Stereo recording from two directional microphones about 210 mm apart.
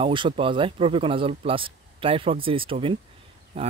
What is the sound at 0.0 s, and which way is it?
Speech, 25° right (ahead or behind).